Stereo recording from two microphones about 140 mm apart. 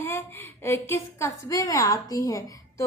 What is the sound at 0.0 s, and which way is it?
A woman's voice, 15° left (ahead or behind).